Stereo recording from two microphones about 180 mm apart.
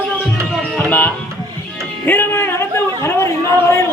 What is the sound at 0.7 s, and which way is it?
Music, 10° left (ahead or behind).